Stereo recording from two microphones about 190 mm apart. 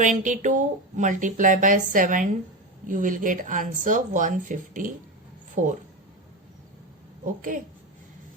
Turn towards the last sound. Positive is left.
turn(degrees=-45)  # may be behind; listen again after turning